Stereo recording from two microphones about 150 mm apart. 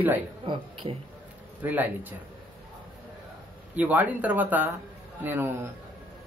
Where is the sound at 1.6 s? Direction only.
10° right (ahead or behind).